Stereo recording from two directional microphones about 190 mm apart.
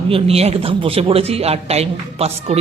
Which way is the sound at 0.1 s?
30° right (ahead or behind).